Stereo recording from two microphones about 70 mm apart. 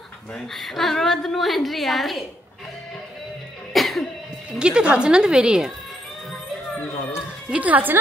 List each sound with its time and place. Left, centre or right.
0.3 s a woman's voice: centre
3.7 s cough: centre
4.5 s speech: centre
7.4 s a woman's voice: centre